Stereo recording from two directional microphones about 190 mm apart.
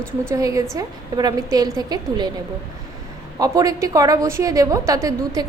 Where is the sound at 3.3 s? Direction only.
20° right (ahead or behind).